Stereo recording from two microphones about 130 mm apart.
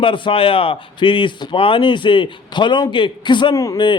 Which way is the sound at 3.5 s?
25° left (ahead or behind).